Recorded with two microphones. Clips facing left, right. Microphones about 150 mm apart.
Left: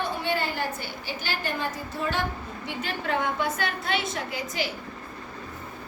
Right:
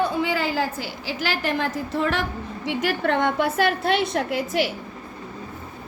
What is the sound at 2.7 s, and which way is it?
A woman's voice, 75° right (ahead or behind).